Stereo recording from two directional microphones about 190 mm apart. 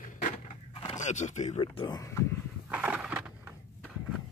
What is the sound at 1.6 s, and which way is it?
Speech, 25° left (ahead or behind).